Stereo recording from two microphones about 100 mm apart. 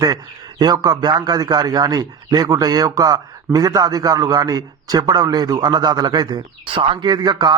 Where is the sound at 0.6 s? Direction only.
40° right (ahead or behind).